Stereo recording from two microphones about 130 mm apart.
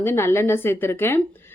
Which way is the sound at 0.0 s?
20° left (ahead or behind).